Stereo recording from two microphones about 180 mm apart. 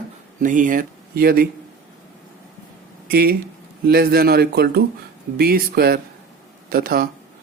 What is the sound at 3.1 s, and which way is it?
Speech, 60° right (ahead or behind).